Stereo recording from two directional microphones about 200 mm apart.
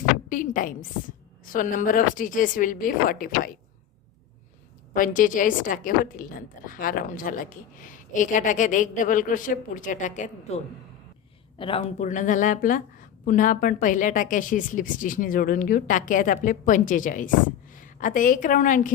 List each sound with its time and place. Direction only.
0.3 s a woman's voice: 40° left (ahead or behind)
4.9 s speech: 40° left (ahead or behind)
11.5 s a woman's voice: 25° left (ahead or behind)